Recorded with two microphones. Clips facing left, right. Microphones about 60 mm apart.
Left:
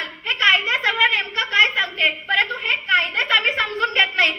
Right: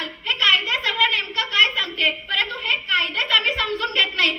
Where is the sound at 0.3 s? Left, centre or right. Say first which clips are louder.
Left 2 dB; left.